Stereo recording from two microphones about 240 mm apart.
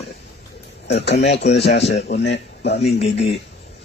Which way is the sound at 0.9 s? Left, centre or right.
Left.